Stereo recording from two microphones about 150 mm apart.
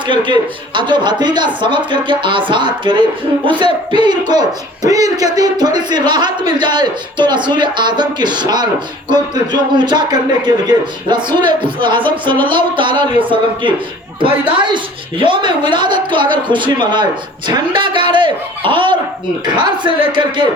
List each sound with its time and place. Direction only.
0.3 s a man's voice: 30° right (ahead or behind)
20.1 s a man's voice: 30° right (ahead or behind)